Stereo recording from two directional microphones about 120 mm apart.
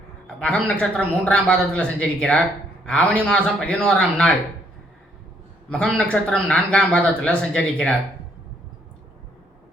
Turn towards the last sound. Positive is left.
turn(degrees=10)  # may be behind; listen again after turning